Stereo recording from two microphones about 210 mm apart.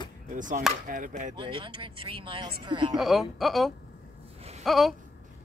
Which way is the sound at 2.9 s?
Centre (ahead or behind).